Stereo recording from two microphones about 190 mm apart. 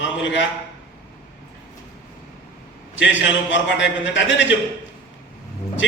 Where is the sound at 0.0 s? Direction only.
75° left (ahead or behind).